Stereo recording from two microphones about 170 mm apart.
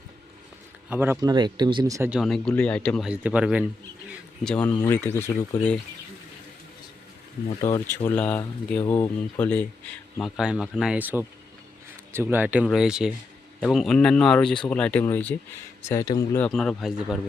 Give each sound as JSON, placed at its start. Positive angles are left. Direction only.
{"t": 0.9, "sound": "speech", "side_deg": -10}
{"t": 2.0, "sound": "speech", "side_deg": 0}
{"t": 3.1, "sound": "speech", "side_deg": -5}
{"t": 4.4, "sound": "speech", "side_deg": 10}
{"t": 7.6, "sound": "speech", "side_deg": 15}
{"t": 16.5, "sound": "speech", "side_deg": 0}